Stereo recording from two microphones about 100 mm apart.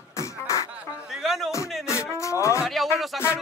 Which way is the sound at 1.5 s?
30° left (ahead or behind).